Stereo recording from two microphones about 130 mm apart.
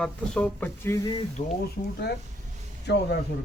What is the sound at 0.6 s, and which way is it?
Speech, 25° left (ahead or behind).